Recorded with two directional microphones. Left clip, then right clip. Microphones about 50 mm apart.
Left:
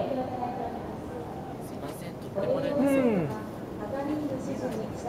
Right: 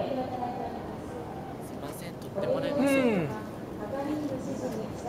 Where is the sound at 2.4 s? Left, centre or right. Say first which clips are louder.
Left 1 dB; centre.